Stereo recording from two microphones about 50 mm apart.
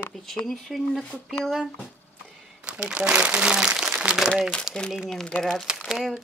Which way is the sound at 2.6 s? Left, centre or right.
Right.